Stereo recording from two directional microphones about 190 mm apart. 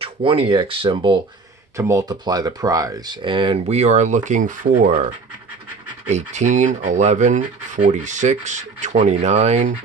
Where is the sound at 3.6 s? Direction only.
35° right (ahead or behind).